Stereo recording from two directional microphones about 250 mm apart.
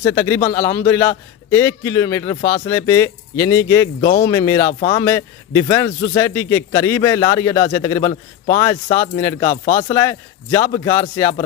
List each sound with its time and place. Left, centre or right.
0.0 s a man's voice: centre
4.0 s speech: left
4.3 s a man's voice: centre
4.6 s speech: left
4.9 s a man's voice: centre